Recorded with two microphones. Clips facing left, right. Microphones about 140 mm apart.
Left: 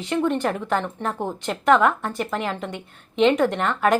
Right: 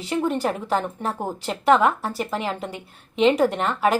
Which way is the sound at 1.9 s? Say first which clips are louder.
Even; 5° right (ahead or behind).